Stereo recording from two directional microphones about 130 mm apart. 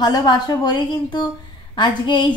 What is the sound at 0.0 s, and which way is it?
A woman's voice, 35° left (ahead or behind).